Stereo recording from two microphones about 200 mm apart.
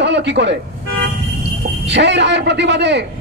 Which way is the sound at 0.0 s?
60° right (ahead or behind).